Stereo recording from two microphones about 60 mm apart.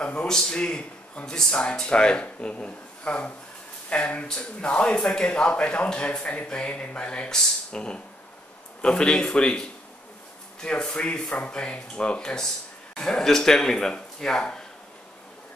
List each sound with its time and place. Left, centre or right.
0.0 s speech: centre